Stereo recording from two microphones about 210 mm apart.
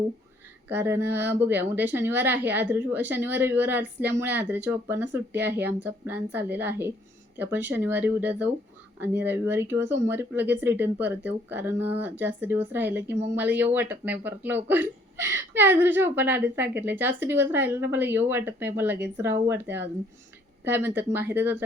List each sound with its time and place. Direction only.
0.7 s speech: 10° right (ahead or behind)
20.7 s speech: 10° right (ahead or behind)